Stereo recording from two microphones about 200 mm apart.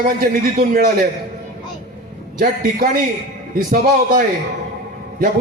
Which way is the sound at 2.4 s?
45° right (ahead or behind).